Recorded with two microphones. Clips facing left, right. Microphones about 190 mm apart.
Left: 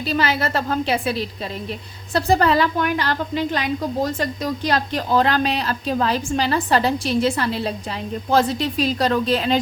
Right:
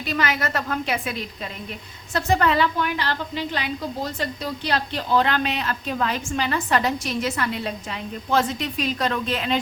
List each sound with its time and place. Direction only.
0.0 s a woman's voice: 30° left (ahead or behind)